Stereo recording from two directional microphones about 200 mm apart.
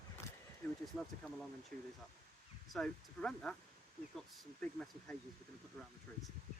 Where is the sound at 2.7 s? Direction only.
5° left (ahead or behind).